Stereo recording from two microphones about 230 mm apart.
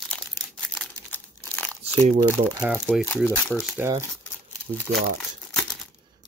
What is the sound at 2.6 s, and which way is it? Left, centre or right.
Speech, centre.